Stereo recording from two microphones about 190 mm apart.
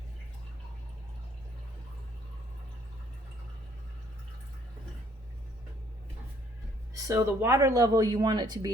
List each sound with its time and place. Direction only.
6.9 s speech: 15° right (ahead or behind)